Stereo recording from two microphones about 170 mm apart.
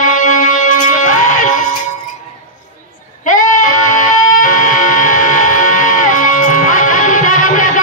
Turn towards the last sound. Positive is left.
turn(degrees=50)  # may be behind; listen again after turning